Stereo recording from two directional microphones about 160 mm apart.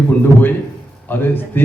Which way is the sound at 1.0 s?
15° left (ahead or behind).